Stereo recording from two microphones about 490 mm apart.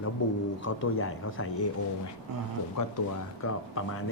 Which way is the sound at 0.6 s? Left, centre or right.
Left.